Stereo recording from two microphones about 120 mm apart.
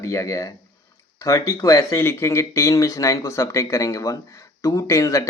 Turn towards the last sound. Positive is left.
turn(degrees=25)  # may be behind; listen again after turning